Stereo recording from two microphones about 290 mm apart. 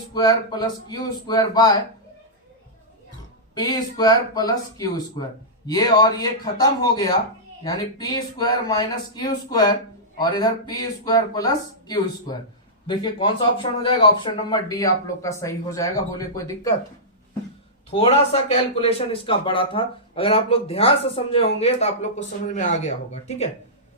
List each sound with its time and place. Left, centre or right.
0.1 s speech: centre
3.5 s speech: centre
17.9 s a man's voice: centre